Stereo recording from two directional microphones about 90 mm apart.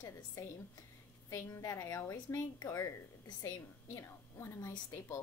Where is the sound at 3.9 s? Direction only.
30° left (ahead or behind).